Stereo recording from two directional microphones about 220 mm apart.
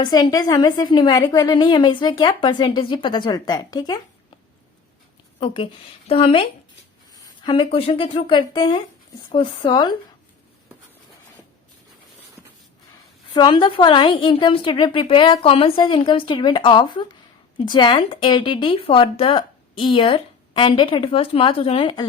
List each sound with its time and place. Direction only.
0.0 s speech: 20° left (ahead or behind)
6.1 s speech: 25° left (ahead or behind)
13.3 s speech: 20° left (ahead or behind)